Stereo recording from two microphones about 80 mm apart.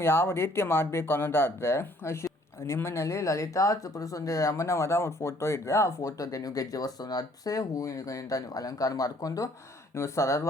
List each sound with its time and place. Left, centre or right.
0.0 s speech: left
9.9 s speech: left